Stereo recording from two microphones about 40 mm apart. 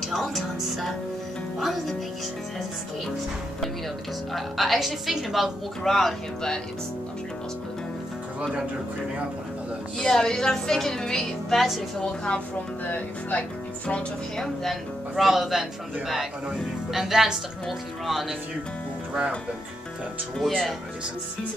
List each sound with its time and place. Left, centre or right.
0.1 s music: centre
1.6 s speech: centre
4.3 s speech: centre
9.9 s a woman's voice: centre
12.8 s speech: left
14.3 s speech: centre
16.9 s a woman's voice: centre
20.3 s speech: centre